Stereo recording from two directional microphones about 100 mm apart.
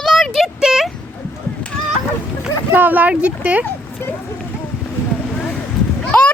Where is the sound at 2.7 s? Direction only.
20° right (ahead or behind).